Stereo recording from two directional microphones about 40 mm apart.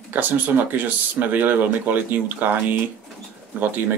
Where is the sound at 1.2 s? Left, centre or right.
Right.